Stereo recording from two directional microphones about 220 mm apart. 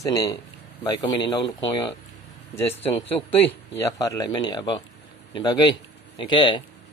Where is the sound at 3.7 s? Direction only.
15° left (ahead or behind).